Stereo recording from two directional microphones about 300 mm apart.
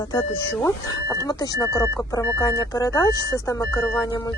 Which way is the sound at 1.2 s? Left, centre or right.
Centre.